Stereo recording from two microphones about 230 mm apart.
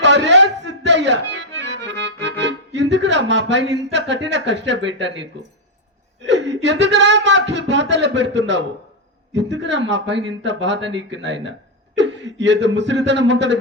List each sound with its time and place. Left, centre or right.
0.0 s accordion: right
3.9 s speech: right
6.2 s speech: right